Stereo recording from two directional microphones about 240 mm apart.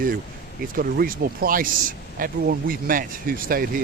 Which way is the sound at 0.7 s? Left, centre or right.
Right.